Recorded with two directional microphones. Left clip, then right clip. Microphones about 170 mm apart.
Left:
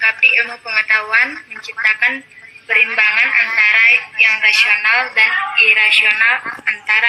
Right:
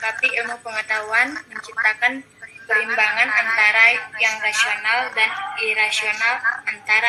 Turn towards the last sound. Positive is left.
turn(degrees=-10)  # may be behind; listen again after turning